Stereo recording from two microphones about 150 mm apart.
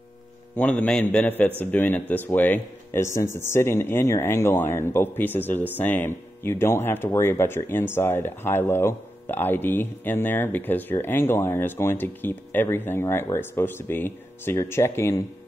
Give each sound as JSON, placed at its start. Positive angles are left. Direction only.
{"t": 0.6, "sound": "speech", "side_deg": 10}